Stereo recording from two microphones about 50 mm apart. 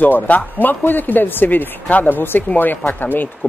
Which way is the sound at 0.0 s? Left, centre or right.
Left.